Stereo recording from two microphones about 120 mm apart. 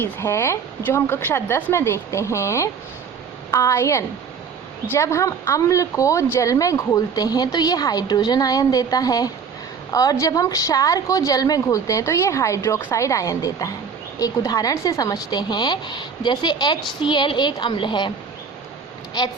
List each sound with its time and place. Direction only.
0.0 s a woman's voice: 20° left (ahead or behind); by 18.1 s 40° left (ahead or behind)